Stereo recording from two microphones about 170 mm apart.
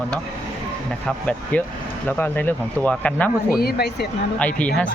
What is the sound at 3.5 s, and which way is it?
Speech, 65° left (ahead or behind).